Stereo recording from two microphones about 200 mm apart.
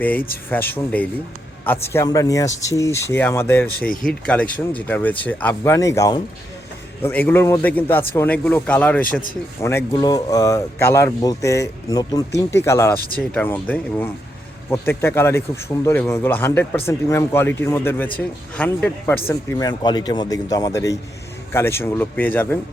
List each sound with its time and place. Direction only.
0.0 s speech: 10° left (ahead or behind)
3.8 s speech: 45° left (ahead or behind)
4.0 s speech: 5° left (ahead or behind)